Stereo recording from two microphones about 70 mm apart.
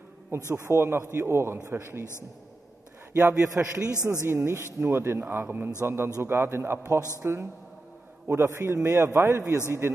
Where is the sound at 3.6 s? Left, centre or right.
Right.